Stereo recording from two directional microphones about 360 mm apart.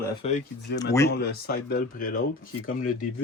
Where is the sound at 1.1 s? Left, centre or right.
Left.